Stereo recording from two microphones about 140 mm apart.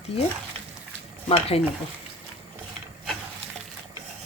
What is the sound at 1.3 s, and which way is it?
Speech, 45° left (ahead or behind).